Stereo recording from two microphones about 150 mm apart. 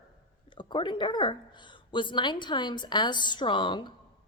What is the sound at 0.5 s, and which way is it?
A woman's voice, 30° left (ahead or behind).